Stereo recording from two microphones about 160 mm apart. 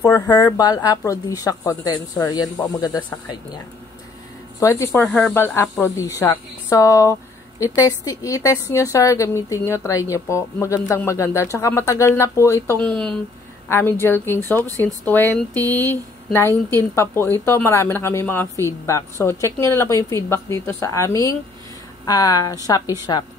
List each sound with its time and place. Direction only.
0.0 s a woman's voice: 20° left (ahead or behind); by 13.2 s 5° left (ahead or behind)
13.7 s a woman's voice: 15° left (ahead or behind)